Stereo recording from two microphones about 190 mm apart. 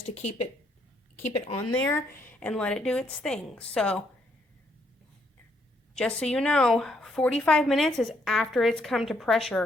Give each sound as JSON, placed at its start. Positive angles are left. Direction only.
{"t": 0.1, "sound": "a woman's voice", "side_deg": 35}
{"t": 1.7, "sound": "a woman's voice", "side_deg": 10}
{"t": 5.9, "sound": "a woman's voice", "side_deg": 5}